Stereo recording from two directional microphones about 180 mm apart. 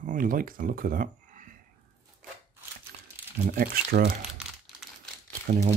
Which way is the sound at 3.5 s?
55° right (ahead or behind).